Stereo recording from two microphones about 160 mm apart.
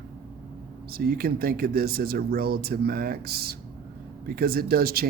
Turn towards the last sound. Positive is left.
turn(degrees=-70)  # may be behind; listen again after turning